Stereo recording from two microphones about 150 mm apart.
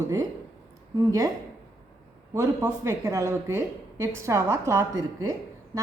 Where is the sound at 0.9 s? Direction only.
20° right (ahead or behind).